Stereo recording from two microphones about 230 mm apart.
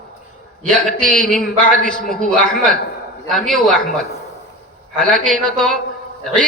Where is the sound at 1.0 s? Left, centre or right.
Centre.